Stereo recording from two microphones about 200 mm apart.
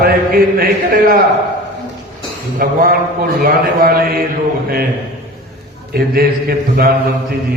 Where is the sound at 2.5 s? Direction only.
45° right (ahead or behind).